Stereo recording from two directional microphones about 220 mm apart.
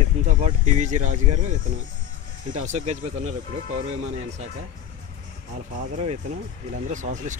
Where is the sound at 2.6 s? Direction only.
30° right (ahead or behind).